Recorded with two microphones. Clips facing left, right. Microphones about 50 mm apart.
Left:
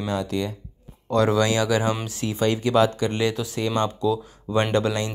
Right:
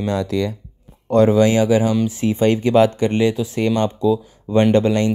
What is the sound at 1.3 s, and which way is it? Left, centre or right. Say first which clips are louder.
Speech: right 6 dB; right.